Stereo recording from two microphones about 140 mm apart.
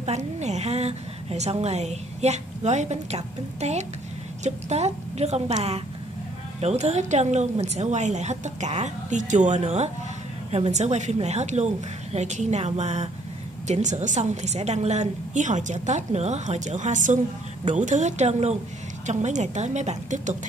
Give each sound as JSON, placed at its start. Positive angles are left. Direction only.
{"t": 0.0, "sound": "a woman's voice", "side_deg": -55}